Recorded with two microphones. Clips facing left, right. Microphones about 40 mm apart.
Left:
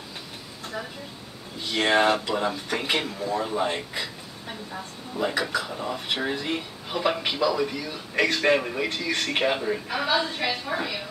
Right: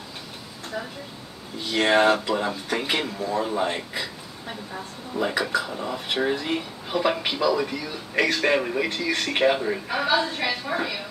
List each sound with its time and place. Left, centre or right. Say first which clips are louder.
0.8 s speech: right 2 dB; centre